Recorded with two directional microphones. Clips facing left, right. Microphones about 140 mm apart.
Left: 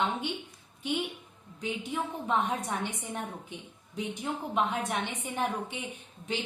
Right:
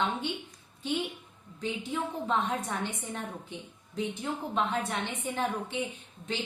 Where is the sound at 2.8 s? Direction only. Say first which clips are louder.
Even; 15° left (ahead or behind).